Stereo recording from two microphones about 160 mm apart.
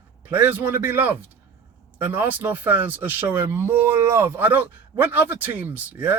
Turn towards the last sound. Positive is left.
turn(degrees=-10)  # may be behind; listen again after turning